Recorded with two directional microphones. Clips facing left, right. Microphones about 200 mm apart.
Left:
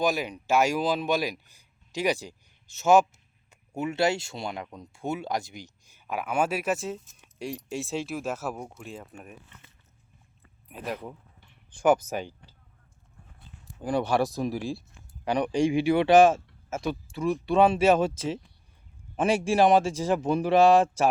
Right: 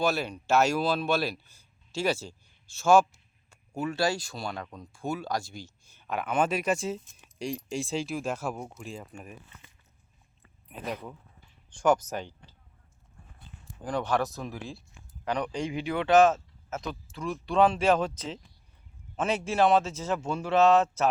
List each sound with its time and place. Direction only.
0.0 s speech: 15° left (ahead or behind)
10.7 s speech: 5° left (ahead or behind)
11.3 s a sound: 65° left (ahead or behind)
12.0 s speech: 55° left (ahead or behind)
13.8 s speech: 10° left (ahead or behind)